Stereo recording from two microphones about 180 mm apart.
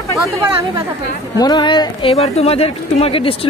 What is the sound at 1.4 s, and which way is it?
Speech, 25° left (ahead or behind).